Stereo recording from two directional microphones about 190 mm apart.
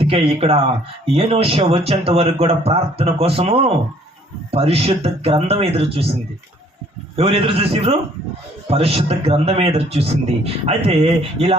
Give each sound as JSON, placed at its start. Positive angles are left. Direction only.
{"t": 0.0, "sound": "speech", "side_deg": -30}
{"t": 7.2, "sound": "speech", "side_deg": -30}